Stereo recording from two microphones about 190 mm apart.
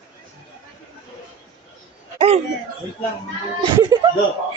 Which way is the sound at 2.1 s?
30° right (ahead or behind).